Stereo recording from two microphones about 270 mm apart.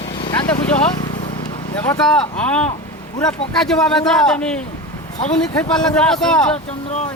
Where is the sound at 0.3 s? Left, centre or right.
Centre.